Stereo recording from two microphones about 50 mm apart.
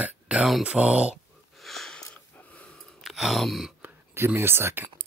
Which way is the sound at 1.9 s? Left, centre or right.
Left.